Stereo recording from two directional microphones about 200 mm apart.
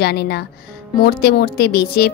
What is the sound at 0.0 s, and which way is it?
Speech, 55° left (ahead or behind).